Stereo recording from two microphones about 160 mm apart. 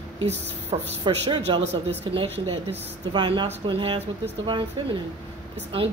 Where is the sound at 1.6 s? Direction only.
90° right.